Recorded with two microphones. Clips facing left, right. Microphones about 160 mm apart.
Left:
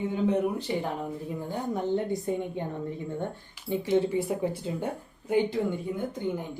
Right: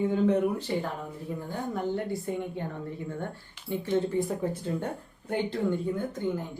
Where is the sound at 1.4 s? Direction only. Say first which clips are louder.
Left 1 dB; 20° left (ahead or behind).